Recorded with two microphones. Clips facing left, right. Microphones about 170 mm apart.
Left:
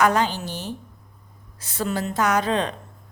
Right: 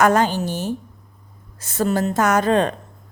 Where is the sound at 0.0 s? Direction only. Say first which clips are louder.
Right 4 dB; 45° right (ahead or behind).